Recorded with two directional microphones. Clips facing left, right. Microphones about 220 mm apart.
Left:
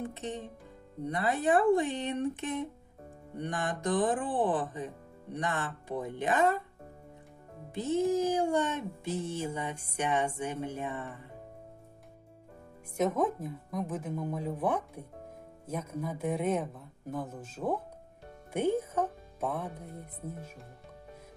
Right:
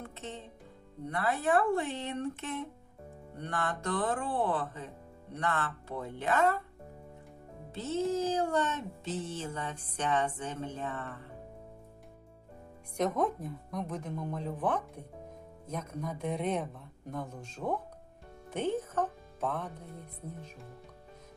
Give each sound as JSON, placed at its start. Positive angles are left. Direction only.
{"t": 0.0, "sound": "speech", "side_deg": 15}
{"t": 7.7, "sound": "speech", "side_deg": 15}
{"t": 13.0, "sound": "speech", "side_deg": 5}
{"t": 18.5, "sound": "music", "side_deg": 10}